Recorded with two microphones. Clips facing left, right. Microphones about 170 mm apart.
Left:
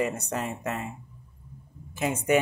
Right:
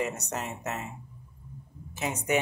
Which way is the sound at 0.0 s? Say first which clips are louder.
Left 3 dB; 55° left (ahead or behind).